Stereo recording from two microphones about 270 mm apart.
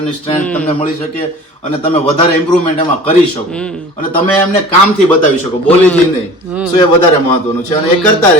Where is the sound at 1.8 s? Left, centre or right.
Left.